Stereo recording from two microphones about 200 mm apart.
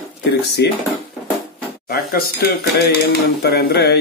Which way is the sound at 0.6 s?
55° left (ahead or behind).